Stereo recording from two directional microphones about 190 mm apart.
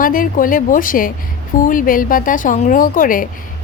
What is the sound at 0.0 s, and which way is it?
Speech, 45° left (ahead or behind).